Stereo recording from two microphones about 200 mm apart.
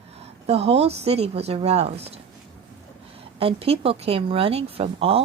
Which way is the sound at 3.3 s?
30° right (ahead or behind).